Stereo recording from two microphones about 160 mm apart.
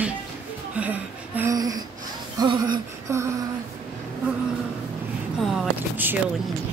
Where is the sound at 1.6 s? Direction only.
25° right (ahead or behind).